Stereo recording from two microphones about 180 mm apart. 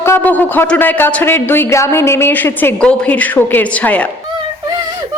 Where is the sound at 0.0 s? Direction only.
10° left (ahead or behind).